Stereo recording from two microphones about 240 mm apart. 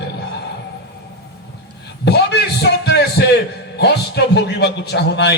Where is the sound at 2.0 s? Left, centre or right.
Left.